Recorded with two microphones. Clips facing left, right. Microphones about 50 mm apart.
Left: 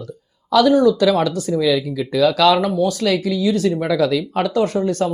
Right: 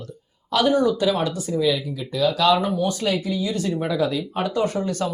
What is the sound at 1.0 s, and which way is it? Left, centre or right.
Speech, left.